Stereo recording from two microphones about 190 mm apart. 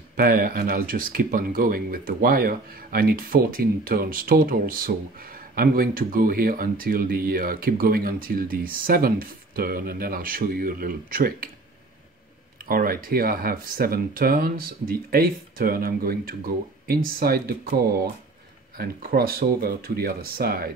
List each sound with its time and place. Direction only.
0.2 s speech: 50° right (ahead or behind)
12.6 s speech: 50° right (ahead or behind)